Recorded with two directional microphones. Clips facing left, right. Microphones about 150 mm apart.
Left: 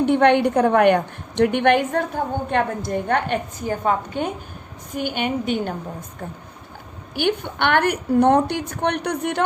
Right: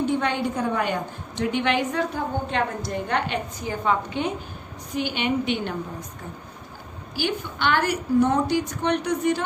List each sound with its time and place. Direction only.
0.0 s a woman's voice: 65° left (ahead or behind); by 5.7 s 45° left (ahead or behind)
7.2 s a woman's voice: 60° left (ahead or behind)